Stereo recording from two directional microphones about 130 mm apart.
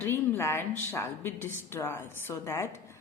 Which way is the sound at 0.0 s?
15° left (ahead or behind).